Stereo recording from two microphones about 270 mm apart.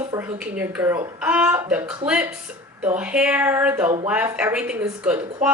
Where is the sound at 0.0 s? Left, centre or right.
Centre.